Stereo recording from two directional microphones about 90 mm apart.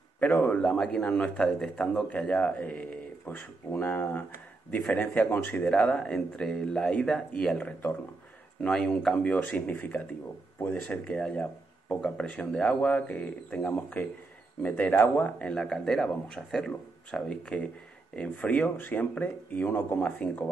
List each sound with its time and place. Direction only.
0.2 s a man's voice: 20° left (ahead or behind)
5.7 s a man's voice: 10° left (ahead or behind)
20.1 s a man's voice: 10° left (ahead or behind)